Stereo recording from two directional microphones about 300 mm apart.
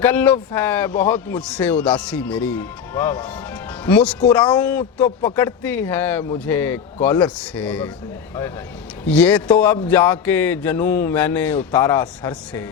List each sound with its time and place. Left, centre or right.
0.0 s a man's voice: centre
9.0 s a man's voice: centre
9.8 s a sound: centre